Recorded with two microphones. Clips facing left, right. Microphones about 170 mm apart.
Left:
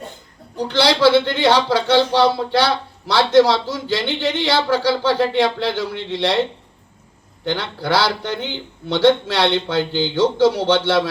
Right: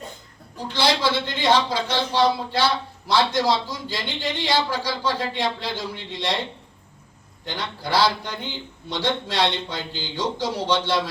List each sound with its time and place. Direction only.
0.7 s a man's voice: 70° left (ahead or behind)
7.4 s a man's voice: 65° left (ahead or behind)